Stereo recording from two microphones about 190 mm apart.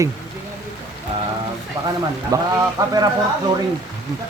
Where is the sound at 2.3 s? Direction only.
20° right (ahead or behind).